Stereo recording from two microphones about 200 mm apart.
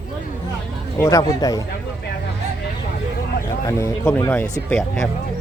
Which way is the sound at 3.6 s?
10° left (ahead or behind).